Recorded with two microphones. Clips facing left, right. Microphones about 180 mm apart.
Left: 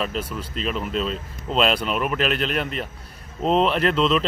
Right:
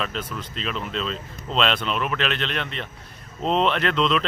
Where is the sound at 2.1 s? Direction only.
40° left (ahead or behind).